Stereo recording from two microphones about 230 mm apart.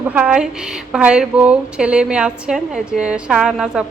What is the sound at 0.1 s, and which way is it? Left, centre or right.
A woman's voice, centre.